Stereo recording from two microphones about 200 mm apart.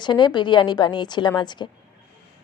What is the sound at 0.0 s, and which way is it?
A woman's voice, 20° left (ahead or behind).